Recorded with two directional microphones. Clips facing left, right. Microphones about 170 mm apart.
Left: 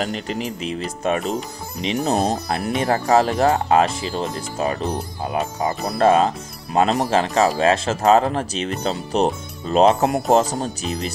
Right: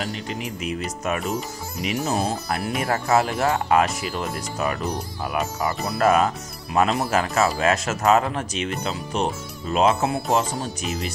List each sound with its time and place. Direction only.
0.0 s speech: 30° left (ahead or behind)
2.0 s speech: 40° left (ahead or behind)